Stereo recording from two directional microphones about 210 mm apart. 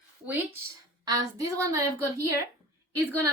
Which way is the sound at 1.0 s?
15° right (ahead or behind).